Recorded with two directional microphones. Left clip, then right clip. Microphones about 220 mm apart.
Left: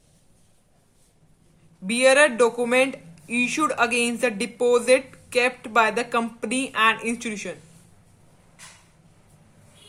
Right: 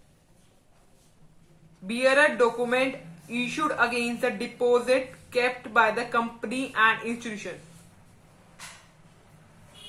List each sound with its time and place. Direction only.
1.9 s speech: 40° left (ahead or behind)